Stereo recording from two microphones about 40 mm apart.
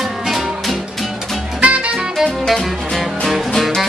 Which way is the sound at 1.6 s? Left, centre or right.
Right.